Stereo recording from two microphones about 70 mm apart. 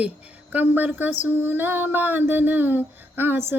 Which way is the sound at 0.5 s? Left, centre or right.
Right.